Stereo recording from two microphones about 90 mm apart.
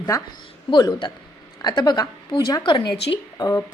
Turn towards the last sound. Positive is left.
turn(degrees=45)  # may be behind; listen again after turning